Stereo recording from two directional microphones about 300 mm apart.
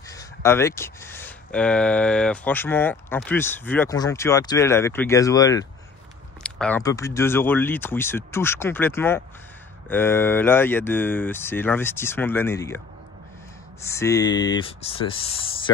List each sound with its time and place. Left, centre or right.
0.1 s speech: centre
13.8 s speech: centre